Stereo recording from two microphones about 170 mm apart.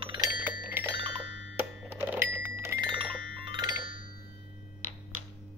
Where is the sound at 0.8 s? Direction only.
35° right (ahead or behind).